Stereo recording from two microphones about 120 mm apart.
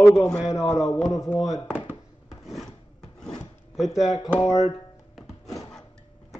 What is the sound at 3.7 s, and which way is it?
Speech, centre (ahead or behind).